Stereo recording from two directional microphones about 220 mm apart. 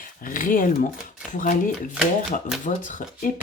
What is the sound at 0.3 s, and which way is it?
Speech, 40° left (ahead or behind).